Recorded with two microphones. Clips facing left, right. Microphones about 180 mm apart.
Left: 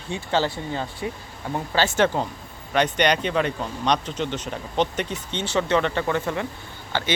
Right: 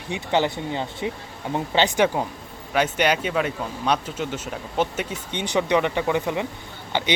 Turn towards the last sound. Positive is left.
turn(degrees=-15)  # may be behind; listen again after turning